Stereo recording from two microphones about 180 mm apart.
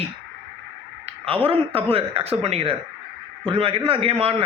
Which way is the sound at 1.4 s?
30° right (ahead or behind).